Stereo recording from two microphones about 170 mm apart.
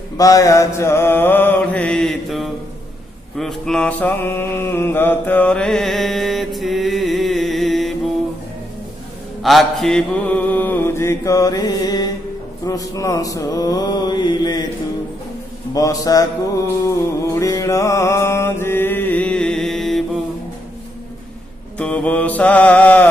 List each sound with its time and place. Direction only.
0.2 s mantra: 20° left (ahead or behind); by 7.9 s centre (ahead or behind)
9.4 s mantra: centre (ahead or behind); by 14.7 s 25° left (ahead or behind)
15.7 s mantra: 20° left (ahead or behind); by 20.0 s centre (ahead or behind)
21.7 s mantra: 5° left (ahead or behind)